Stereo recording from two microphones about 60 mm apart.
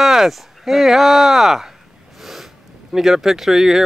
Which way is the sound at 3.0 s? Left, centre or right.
Centre.